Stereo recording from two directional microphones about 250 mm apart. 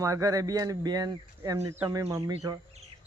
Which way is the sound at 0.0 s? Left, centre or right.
Centre.